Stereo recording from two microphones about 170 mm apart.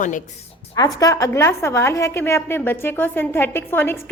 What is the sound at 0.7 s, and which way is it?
A woman's voice, 20° left (ahead or behind).